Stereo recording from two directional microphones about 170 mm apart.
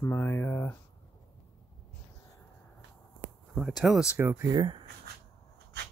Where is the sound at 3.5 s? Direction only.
Centre (ahead or behind); by 4.8 s 25° right (ahead or behind).